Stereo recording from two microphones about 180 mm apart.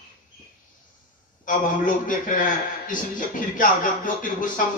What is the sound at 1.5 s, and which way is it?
A man's voice, 45° left (ahead or behind).